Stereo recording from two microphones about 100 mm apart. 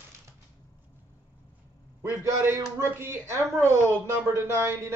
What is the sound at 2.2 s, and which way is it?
A man's voice, 25° right (ahead or behind).